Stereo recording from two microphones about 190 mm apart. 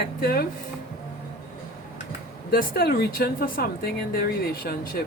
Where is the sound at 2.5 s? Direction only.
50° left (ahead or behind).